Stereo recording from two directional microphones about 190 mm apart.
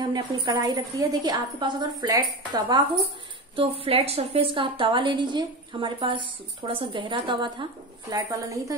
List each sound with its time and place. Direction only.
0.0 s a woman's voice: 20° right (ahead or behind)
3.8 s a woman's voice: 30° right (ahead or behind)